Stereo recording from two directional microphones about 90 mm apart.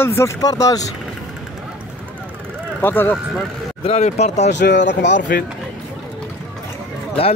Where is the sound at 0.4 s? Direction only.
40° left (ahead or behind).